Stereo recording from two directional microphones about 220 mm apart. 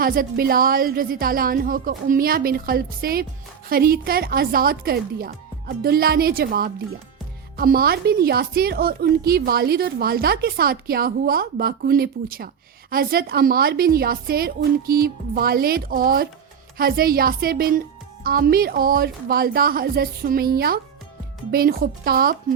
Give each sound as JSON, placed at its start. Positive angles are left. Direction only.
{"t": 0.0, "sound": "a woman's voice", "side_deg": -40}